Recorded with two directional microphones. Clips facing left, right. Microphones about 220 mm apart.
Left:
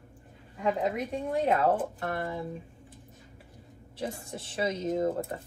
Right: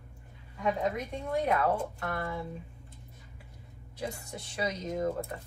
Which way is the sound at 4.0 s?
30° left (ahead or behind).